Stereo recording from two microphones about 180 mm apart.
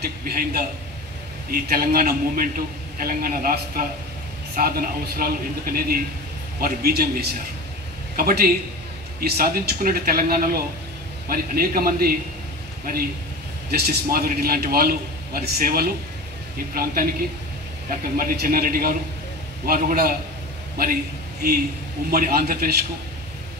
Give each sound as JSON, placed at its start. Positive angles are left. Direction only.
{"t": 0.0, "sound": "a man's voice", "side_deg": -55}
{"t": 13.7, "sound": "a man's voice", "side_deg": -55}